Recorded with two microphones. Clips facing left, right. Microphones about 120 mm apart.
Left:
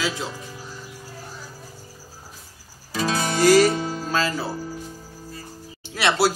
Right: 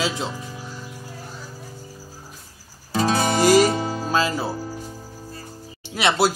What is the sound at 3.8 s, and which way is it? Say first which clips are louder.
Music: right 2 dB; 45° right (ahead or behind).